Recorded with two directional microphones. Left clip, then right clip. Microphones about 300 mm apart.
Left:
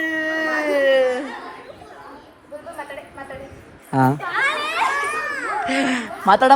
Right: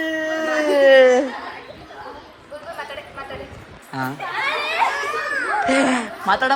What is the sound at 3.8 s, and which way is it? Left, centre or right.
Speech, centre.